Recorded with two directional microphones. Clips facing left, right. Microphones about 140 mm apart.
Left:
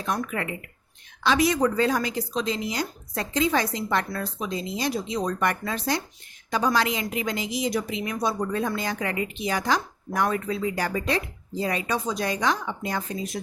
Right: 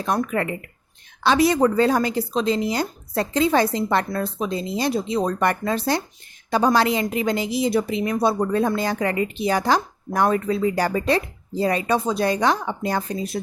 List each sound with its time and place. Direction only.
0.0 s speech: 35° right (ahead or behind)